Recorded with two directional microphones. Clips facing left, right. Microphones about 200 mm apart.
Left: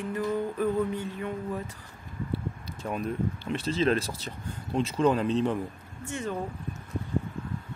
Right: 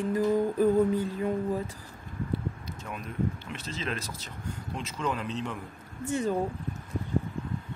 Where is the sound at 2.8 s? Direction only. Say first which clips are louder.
Left 3 dB; 35° left (ahead or behind).